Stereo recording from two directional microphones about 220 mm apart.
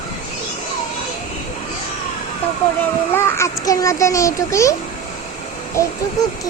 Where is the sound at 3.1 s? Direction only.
10° left (ahead or behind).